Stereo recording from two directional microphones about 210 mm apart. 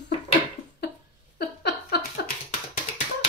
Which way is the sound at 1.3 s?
50° left (ahead or behind).